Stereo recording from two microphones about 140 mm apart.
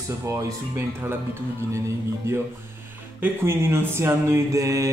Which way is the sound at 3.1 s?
15° right (ahead or behind).